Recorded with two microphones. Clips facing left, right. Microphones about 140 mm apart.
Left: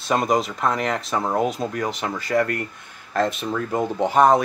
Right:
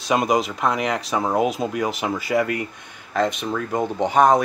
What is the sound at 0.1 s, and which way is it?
Speech, centre (ahead or behind).